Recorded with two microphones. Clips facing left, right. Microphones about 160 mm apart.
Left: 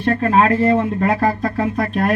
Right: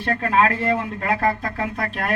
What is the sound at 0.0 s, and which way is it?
Speech, 35° left (ahead or behind).